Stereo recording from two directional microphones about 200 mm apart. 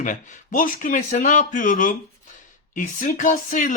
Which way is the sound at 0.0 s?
40° left (ahead or behind).